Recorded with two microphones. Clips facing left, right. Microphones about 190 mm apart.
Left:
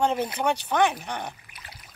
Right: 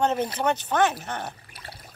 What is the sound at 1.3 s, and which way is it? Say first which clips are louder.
Trickle: right 4 dB; 35° right (ahead or behind).